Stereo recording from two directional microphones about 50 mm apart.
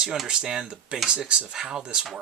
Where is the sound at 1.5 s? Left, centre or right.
Centre.